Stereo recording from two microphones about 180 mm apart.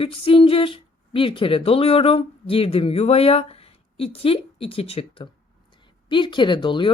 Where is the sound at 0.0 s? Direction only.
30° left (ahead or behind).